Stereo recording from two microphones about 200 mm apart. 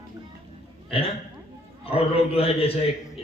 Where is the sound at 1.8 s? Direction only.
30° left (ahead or behind).